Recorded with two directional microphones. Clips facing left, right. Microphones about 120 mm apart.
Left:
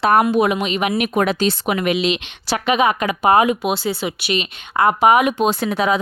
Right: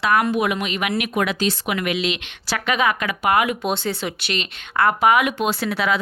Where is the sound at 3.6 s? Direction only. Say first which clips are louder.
Left 3 dB; 10° left (ahead or behind).